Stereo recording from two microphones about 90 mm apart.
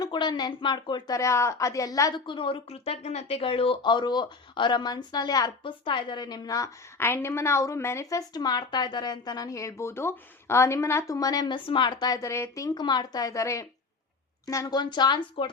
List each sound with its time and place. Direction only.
0.1 s speech: 55° left (ahead or behind)
1.1 s a woman's voice: 35° left (ahead or behind)
2.2 s speech: 70° left (ahead or behind); by 5.5 s 50° left (ahead or behind)
5.6 s speech: 65° left (ahead or behind); by 6.7 s 45° left (ahead or behind)
7.0 s a woman's voice: 30° left (ahead or behind)
8.3 s a woman's voice: 50° left (ahead or behind)
11.5 s speech: 65° left (ahead or behind); by 12.7 s 35° left (ahead or behind)
12.7 s a woman's voice: 55° left (ahead or behind); by 14.7 s 35° left (ahead or behind)
14.7 s speech: 55° left (ahead or behind)